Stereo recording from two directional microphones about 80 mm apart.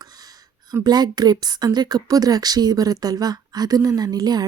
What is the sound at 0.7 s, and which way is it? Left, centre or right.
Speech, right.